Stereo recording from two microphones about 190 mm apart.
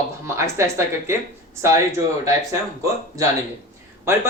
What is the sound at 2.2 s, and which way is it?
Speech, 15° right (ahead or behind).